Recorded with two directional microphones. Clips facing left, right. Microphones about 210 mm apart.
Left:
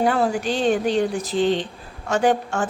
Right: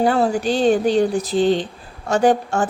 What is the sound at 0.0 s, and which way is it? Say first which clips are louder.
A woman's voice: right 3 dB; 35° right (ahead or behind).